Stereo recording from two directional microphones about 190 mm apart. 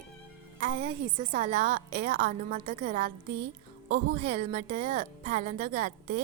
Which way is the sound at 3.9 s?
35° right (ahead or behind).